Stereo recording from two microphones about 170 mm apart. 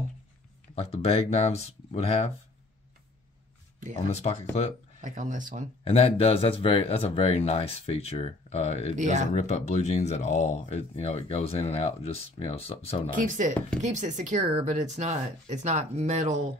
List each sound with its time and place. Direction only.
0.7 s speech: 35° left (ahead or behind)
5.0 s speech: 50° right (ahead or behind)
5.9 s speech: 35° left (ahead or behind)
8.9 s speech: 45° right (ahead or behind)
9.3 s speech: 40° left (ahead or behind)
13.1 s speech: 50° right (ahead or behind)